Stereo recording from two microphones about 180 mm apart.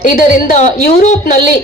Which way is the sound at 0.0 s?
45° left (ahead or behind).